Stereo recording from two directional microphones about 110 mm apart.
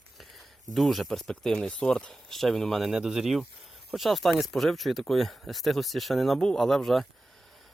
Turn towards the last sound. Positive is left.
turn(degrees=0)  # may be behind; listen again after turning